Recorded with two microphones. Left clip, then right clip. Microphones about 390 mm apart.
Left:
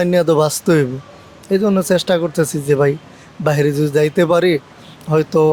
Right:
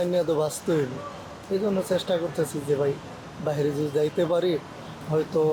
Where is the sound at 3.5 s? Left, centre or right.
Left.